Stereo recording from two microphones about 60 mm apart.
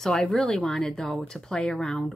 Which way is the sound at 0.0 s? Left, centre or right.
Centre.